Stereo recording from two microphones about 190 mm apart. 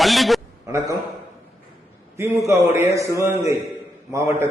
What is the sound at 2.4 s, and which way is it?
A man's voice, 15° right (ahead or behind).